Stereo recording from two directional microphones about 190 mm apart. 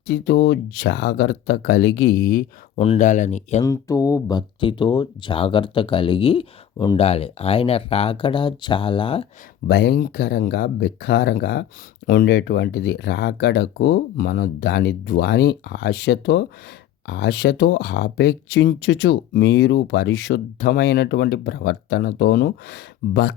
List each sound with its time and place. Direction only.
0.1 s speech: 65° left (ahead or behind)
2.7 s speech: 30° left (ahead or behind)
3.0 s speech: 40° left (ahead or behind)
3.6 s speech: 15° left (ahead or behind)
9.6 s speech: 55° left (ahead or behind)